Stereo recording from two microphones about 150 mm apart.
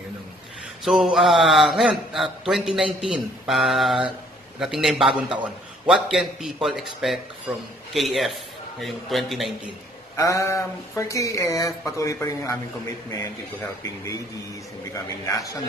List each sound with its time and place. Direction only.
0.8 s a man's voice: centre (ahead or behind)
10.1 s speech: 20° left (ahead or behind)